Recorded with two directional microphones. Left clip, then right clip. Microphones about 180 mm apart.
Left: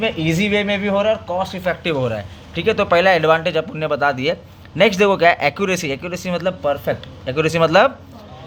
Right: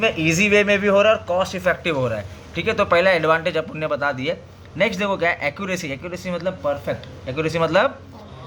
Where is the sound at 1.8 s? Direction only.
30° left (ahead or behind).